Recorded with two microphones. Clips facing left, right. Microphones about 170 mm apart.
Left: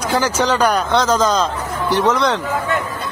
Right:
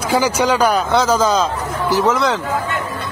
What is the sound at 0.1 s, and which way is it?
Speech, 10° right (ahead or behind).